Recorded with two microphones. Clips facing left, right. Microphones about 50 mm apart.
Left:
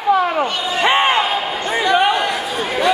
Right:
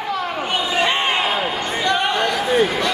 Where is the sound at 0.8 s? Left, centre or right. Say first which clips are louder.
Left 5 dB; left.